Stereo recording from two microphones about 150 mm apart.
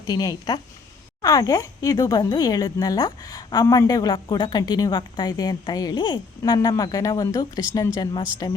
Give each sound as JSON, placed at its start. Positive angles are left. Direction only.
{"t": 0.0, "sound": "speech", "side_deg": 25}